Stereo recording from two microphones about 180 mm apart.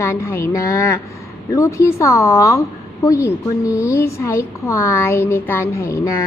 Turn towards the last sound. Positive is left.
turn(degrees=15)  # may be behind; listen again after turning